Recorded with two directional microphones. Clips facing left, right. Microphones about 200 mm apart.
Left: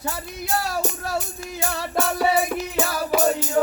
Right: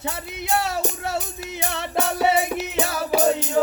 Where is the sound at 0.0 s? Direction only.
20° right (ahead or behind).